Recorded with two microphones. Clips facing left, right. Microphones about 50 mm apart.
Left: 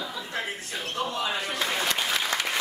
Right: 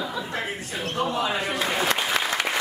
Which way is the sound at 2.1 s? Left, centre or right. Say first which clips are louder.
Right 3 dB; centre.